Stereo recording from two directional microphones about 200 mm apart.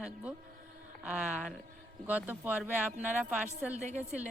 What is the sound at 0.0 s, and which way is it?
A woman's voice, 5° right (ahead or behind).